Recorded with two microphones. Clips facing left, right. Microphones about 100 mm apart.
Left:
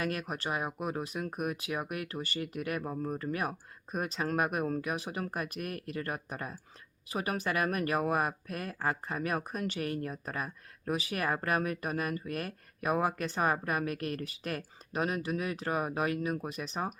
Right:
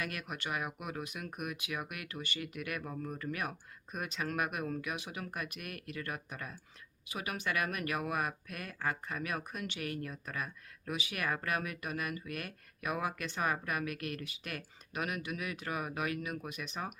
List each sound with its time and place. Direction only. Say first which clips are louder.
0.0 s speech: left 6 dB; 35° left (ahead or behind)